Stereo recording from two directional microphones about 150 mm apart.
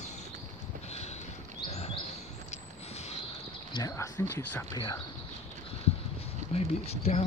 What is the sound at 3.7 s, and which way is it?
Speech, 20° left (ahead or behind).